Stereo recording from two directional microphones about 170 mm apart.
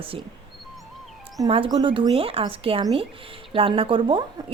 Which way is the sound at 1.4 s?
30° right (ahead or behind).